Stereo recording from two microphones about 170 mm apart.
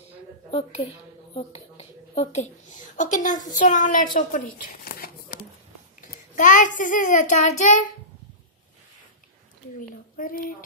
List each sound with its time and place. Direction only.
0.5 s a woman's voice: 30° left (ahead or behind)
9.8 s a woman's voice: 55° left (ahead or behind)